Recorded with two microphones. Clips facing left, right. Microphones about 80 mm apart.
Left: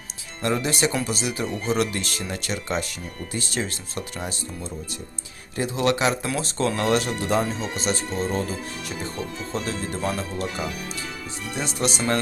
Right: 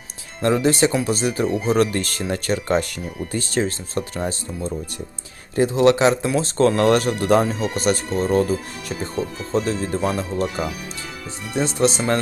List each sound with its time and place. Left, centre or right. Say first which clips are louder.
0.6 s speech: right 6 dB; right
1.5 s speech: right 5 dB; centre
1.8 s speech: right 6 dB; right
5.5 s speech: right 7 dB; right
6.6 s speech: right 6 dB; right
9.5 s speech: right 8 dB; right
10.0 s speech: right 5 dB; centre
11.5 s speech: right 7 dB; right